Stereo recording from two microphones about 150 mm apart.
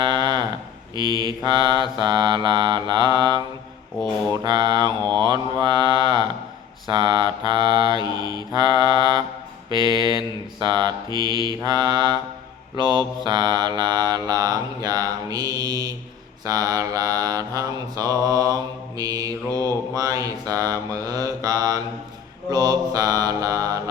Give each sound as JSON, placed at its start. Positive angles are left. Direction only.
{"t": 0.0, "sound": "a sound", "side_deg": -30}
{"t": 0.9, "sound": "mantra", "side_deg": -30}
{"t": 4.4, "sound": "mantra", "side_deg": -30}